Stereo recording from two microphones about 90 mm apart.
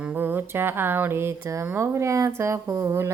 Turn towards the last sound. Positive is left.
turn(degrees=-30)  # may be behind; listen again after turning